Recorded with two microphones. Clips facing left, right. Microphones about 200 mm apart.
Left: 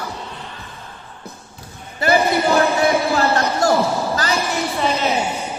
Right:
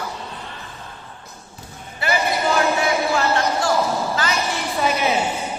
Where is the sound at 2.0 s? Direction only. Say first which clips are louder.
Left 5 dB; 40° left (ahead or behind).